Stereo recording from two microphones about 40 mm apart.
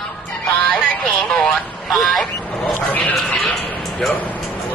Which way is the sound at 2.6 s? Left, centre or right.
Left.